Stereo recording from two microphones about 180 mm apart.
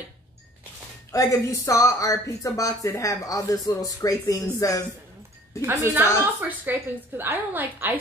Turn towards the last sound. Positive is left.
turn(degrees=-10)  # may be behind; listen again after turning